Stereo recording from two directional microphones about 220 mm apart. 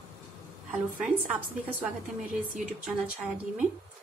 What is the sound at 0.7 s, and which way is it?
Speech, 5° right (ahead or behind).